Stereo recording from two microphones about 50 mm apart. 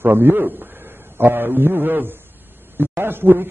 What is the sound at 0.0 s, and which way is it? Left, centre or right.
A man's voice, right.